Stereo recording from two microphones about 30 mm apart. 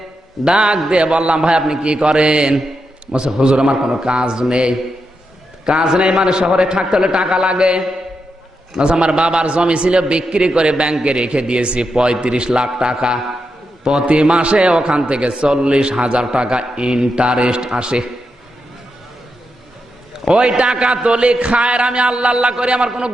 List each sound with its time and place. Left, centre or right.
0.4 s a man's voice: right
5.7 s a man's voice: right
8.8 s a man's voice: right
14.0 s a man's voice: right
20.7 s a man's voice: right